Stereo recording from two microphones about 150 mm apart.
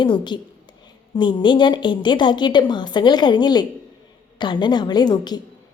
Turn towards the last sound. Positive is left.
turn(degrees=30)  # may be behind; listen again after turning